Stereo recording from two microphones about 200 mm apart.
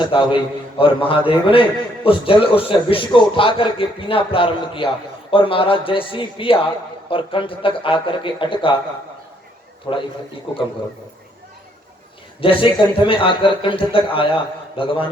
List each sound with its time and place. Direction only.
0.0 s a man's voice: 25° left (ahead or behind)
9.9 s a man's voice: 25° left (ahead or behind)
12.4 s a man's voice: 25° left (ahead or behind)